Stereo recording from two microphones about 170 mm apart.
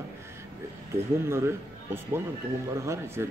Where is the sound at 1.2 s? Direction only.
15° right (ahead or behind).